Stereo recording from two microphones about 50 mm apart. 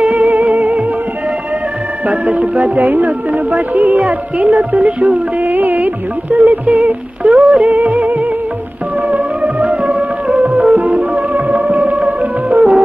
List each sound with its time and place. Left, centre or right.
0.0 s music: right
2.0 s music: right